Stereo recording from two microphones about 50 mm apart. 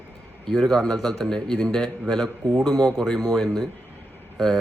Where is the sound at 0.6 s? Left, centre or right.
Centre.